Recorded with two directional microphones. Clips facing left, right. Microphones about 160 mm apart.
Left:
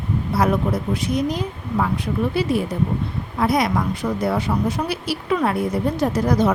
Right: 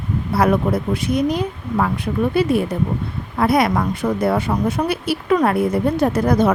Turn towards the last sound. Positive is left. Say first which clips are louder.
# right 2 dB
turn(degrees=-55)  # may be behind; listen again after turning